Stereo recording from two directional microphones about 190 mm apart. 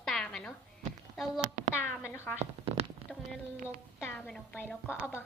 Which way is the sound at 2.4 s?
35° right (ahead or behind).